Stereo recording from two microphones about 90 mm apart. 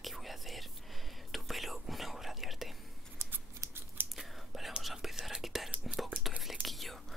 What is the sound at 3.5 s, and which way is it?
Scissors, 35° right (ahead or behind).